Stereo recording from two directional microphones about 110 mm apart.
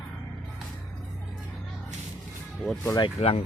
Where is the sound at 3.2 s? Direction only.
70° left (ahead or behind).